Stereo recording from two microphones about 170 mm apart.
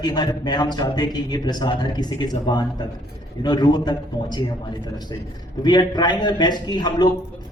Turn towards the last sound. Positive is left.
turn(degrees=25)  # may be behind; listen again after turning